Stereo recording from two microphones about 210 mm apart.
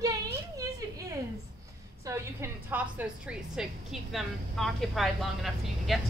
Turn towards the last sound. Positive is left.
turn(degrees=0)  # may be behind; listen again after turning